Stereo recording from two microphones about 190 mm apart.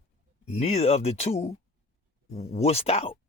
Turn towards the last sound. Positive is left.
turn(degrees=30)  # may be behind; listen again after turning